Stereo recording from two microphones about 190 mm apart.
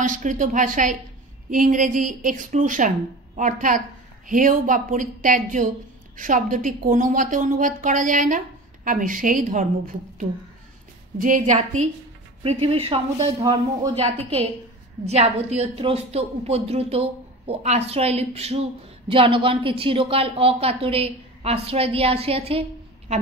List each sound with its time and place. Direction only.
0.0 s a woman's voice: 40° right (ahead or behind)
11.1 s a woman's voice: 45° right (ahead or behind)
12.4 s a woman's voice: 30° right (ahead or behind)